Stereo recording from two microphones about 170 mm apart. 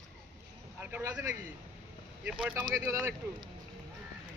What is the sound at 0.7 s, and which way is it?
Vehicle, 10° right (ahead or behind).